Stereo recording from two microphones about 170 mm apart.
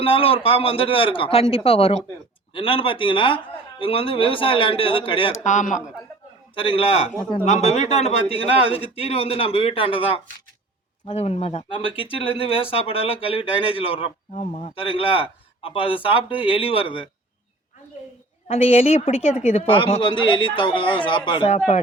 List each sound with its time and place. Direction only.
0.0 s speech: 30° left (ahead or behind)
5.3 s speech: 45° left (ahead or behind)
6.5 s speech: 30° left (ahead or behind)
18.4 s speech: 40° left (ahead or behind)